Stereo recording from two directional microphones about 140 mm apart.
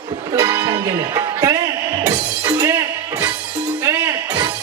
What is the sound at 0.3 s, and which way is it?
Music, 25° right (ahead or behind).